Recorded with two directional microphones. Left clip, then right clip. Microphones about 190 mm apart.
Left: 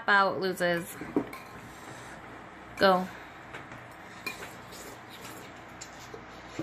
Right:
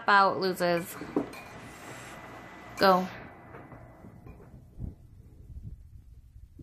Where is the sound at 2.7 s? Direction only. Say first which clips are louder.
Right 1 dB; 5° right (ahead or behind).